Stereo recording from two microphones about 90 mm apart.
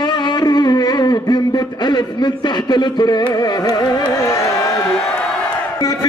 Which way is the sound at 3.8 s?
35° left (ahead or behind).